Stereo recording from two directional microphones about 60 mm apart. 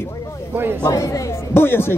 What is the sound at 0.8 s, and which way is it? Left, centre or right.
Speech, left.